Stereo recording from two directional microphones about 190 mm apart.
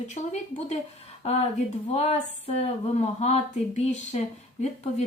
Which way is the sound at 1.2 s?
35° left (ahead or behind).